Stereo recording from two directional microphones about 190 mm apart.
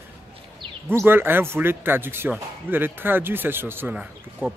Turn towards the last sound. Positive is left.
turn(degrees=-5)  # may be behind; listen again after turning